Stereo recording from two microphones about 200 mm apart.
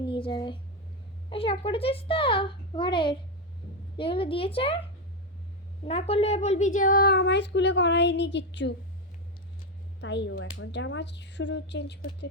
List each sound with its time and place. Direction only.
0.0 s a child's voice: 25° left (ahead or behind)
5.8 s speech: 30° left (ahead or behind); by 8.7 s 60° left (ahead or behind)
10.0 s speech: 60° left (ahead or behind)